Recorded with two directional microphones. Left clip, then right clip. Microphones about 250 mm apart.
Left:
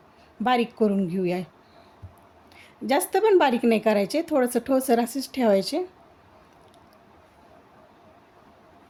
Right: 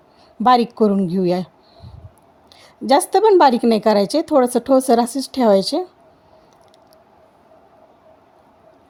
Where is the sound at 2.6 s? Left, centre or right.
Right.